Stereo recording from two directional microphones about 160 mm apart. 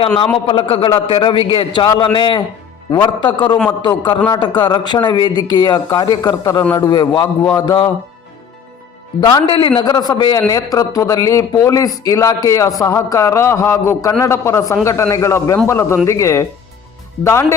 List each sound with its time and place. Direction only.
0.4 s a man's voice: 30° left (ahead or behind)
9.2 s a man's voice: 30° left (ahead or behind)